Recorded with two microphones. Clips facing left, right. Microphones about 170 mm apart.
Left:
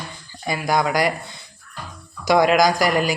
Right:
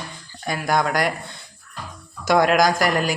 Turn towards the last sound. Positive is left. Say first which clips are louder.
# left 1 dB
turn(degrees=0)  # may be behind; listen again after turning